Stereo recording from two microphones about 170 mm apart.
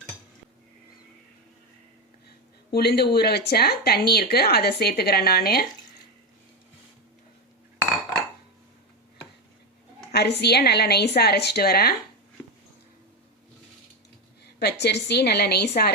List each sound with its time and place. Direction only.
2.7 s speech: 70° left (ahead or behind)
10.1 s speech: 75° left (ahead or behind)
14.6 s speech: 75° left (ahead or behind)